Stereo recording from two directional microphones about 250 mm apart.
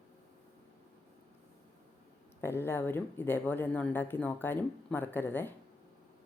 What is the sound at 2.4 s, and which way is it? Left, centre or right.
Speech, centre.